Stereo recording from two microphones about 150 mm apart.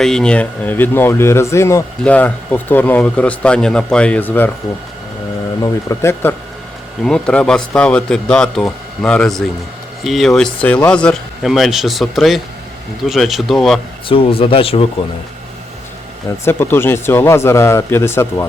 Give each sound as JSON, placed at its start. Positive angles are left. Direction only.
{"t": 0.0, "sound": "speech", "side_deg": 5}
{"t": 5.9, "sound": "speech", "side_deg": 15}
{"t": 7.0, "sound": "speech", "side_deg": 5}
{"t": 14.1, "sound": "speech", "side_deg": 40}
{"t": 16.4, "sound": "speech", "side_deg": 15}